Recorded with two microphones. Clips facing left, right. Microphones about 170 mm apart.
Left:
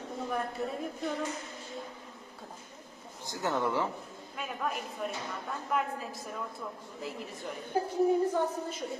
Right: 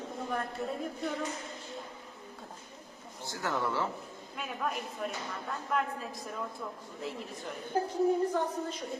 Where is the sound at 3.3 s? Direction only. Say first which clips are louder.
Left 2 dB; 20° left (ahead or behind).